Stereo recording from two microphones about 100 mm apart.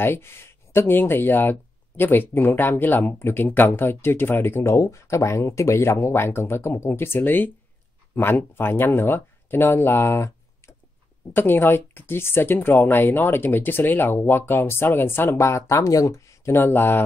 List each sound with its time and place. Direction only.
0.0 s speech: 25° left (ahead or behind)
11.3 s speech: 20° left (ahead or behind)